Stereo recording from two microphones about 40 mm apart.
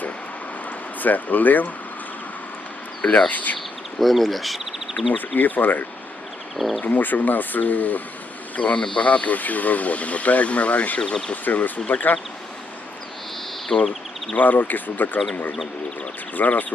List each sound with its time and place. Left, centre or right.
1.0 s speech: left
3.0 s speech: left
3.2 s speech: left
4.0 s speech: centre
5.1 s speech: left
6.6 s speech: centre
6.8 s speech: left
13.7 s speech: left
16.3 s speech: left